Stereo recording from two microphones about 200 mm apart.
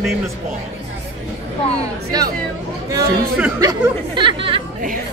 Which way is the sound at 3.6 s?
20° right (ahead or behind).